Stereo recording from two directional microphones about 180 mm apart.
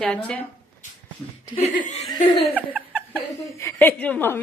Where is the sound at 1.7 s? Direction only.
45° left (ahead or behind).